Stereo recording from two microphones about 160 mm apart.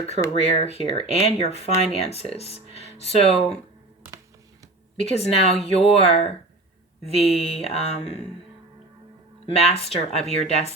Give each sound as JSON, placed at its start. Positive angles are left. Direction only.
{"t": 0.4, "sound": "speech", "side_deg": 40}
{"t": 4.9, "sound": "speech", "side_deg": 40}
{"t": 9.5, "sound": "speech", "side_deg": 40}